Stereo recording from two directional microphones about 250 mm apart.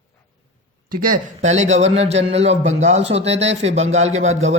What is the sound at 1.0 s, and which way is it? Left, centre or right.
A man's voice, right.